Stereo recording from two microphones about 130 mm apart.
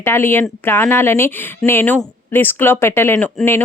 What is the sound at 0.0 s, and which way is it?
A woman's voice, 15° left (ahead or behind).